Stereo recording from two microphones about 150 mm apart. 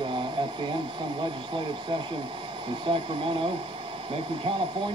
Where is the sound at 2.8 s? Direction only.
35° right (ahead or behind).